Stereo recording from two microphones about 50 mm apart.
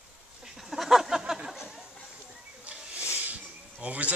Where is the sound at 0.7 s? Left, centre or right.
Centre.